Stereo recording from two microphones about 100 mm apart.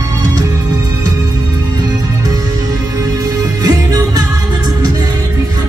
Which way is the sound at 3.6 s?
35° right (ahead or behind).